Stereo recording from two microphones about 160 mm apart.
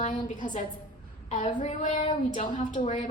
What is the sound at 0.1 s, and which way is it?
Speech, 30° left (ahead or behind).